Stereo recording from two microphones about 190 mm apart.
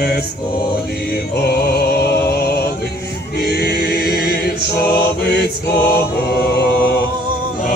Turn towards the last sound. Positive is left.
turn(degrees=55)  # may be behind; listen again after turning